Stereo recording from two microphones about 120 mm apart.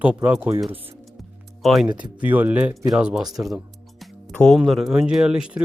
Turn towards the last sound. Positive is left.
turn(degrees=-5)  # may be behind; listen again after turning